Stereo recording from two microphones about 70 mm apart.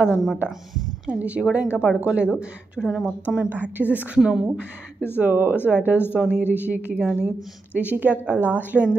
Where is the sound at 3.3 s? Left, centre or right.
Right.